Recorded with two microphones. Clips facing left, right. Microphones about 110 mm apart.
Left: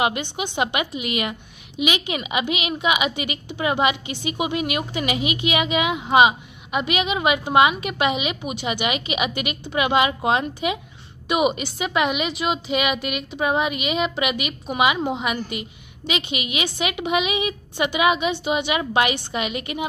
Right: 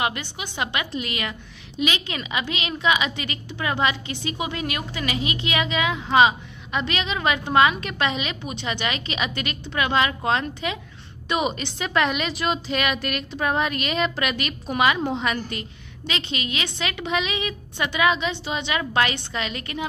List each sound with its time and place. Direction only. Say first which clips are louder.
0.0 s a woman's voice: left 4 dB; 20° left (ahead or behind)